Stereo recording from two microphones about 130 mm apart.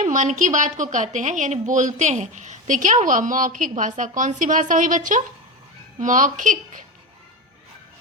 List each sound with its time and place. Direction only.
0.0 s a woman's voice: 70° right (ahead or behind)